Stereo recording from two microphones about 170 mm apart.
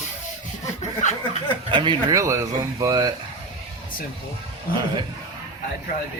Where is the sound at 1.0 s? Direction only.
45° left (ahead or behind).